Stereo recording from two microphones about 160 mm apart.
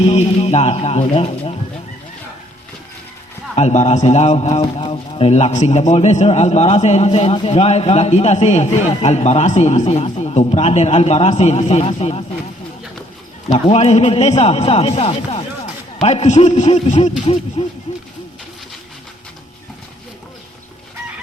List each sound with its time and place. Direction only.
0.0 s speech: 40° left (ahead or behind)
3.5 s a man's voice: 45° left (ahead or behind)
4.6 s a man's voice: 30° left (ahead or behind)
13.5 s a man's voice: 40° left (ahead or behind)